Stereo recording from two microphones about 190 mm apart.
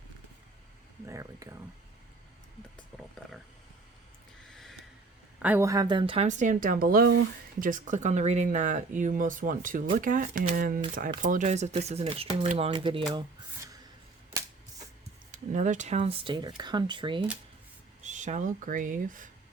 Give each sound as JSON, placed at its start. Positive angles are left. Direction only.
{"t": 1.0, "sound": "speech", "side_deg": -15}
{"t": 2.9, "sound": "speech", "side_deg": 0}
{"t": 4.5, "sound": "a sound", "side_deg": 0}
{"t": 5.4, "sound": "speech", "side_deg": -10}
{"t": 15.3, "sound": "speech", "side_deg": -40}
{"t": 18.0, "sound": "speech", "side_deg": -40}